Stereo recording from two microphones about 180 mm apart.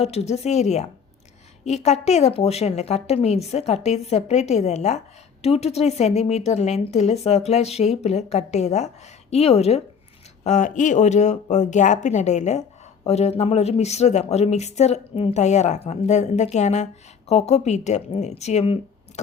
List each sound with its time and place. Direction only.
0.0 s speech: 35° left (ahead or behind)